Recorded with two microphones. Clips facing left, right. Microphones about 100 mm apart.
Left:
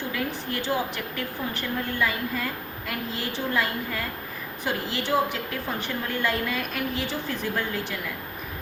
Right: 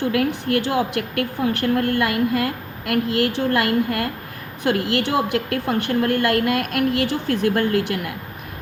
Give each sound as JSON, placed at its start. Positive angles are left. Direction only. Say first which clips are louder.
{"t": 0.1, "sound": "a woman's voice", "louder": "right 10 dB", "side_deg": -65}